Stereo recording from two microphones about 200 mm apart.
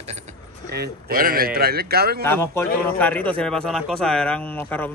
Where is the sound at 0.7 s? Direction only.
50° right (ahead or behind).